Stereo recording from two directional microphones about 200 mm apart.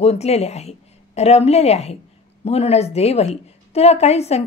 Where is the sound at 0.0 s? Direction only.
30° left (ahead or behind).